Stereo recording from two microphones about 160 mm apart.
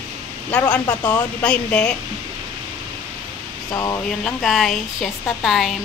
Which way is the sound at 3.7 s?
20° left (ahead or behind).